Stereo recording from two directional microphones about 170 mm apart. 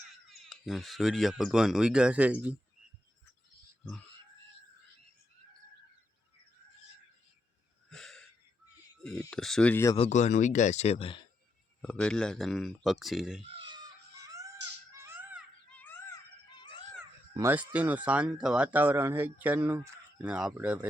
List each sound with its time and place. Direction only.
0.3 s speech: centre (ahead or behind)
7.9 s wheeze: 5° left (ahead or behind)
9.0 s speech: 5° left (ahead or behind)
10.0 s speech: 45° left (ahead or behind)
11.8 s speech: 5° left (ahead or behind)
13.5 s wail: 30° right (ahead or behind)
14.9 s music: 15° right (ahead or behind)
15.7 s a sound: 10° left (ahead or behind)
16.6 s a sound: 30° left (ahead or behind)
17.5 s speech: 10° right (ahead or behind)